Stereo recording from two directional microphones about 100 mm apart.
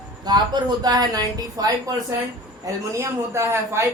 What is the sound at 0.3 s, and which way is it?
Speech, 45° right (ahead or behind).